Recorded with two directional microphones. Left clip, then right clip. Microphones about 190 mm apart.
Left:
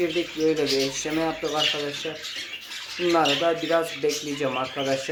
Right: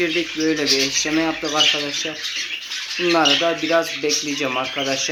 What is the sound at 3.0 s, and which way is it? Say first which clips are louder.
Speech: right 4 dB; centre (ahead or behind).